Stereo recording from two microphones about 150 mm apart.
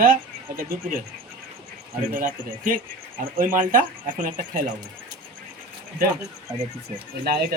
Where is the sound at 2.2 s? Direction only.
65° right (ahead or behind).